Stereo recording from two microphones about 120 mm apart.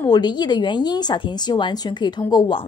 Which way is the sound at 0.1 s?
35° left (ahead or behind).